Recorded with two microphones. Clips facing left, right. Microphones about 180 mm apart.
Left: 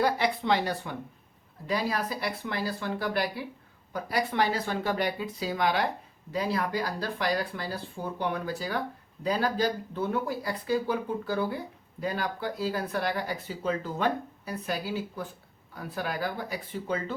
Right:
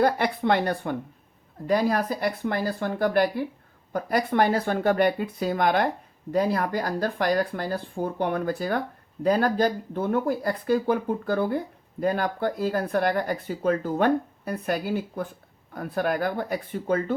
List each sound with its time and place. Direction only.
0.0 s speech: 55° right (ahead or behind)